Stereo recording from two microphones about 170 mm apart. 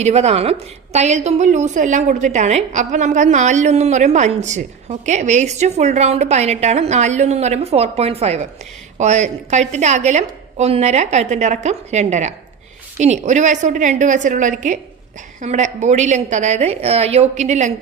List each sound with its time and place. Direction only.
0.0 s a woman's voice: 40° right (ahead or behind)